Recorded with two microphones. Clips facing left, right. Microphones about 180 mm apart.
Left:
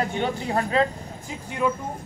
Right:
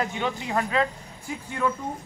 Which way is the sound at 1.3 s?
20° left (ahead or behind).